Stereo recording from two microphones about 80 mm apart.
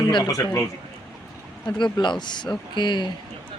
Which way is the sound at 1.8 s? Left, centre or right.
Left.